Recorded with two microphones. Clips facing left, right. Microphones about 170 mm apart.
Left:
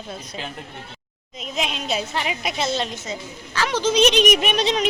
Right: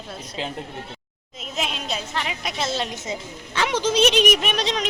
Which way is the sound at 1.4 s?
Centre (ahead or behind).